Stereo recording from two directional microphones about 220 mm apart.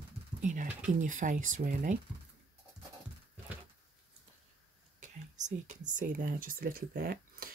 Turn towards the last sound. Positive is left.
turn(degrees=-40)  # may be behind; listen again after turning